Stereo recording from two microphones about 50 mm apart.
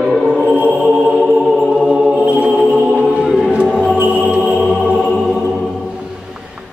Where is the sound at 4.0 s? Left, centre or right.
Right.